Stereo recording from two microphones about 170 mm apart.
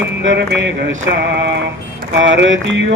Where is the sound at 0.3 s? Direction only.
90° right.